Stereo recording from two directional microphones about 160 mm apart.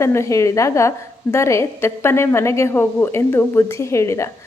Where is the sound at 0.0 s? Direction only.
20° left (ahead or behind).